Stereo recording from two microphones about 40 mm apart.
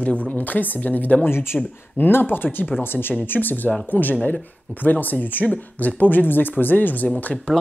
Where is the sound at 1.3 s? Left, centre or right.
Left.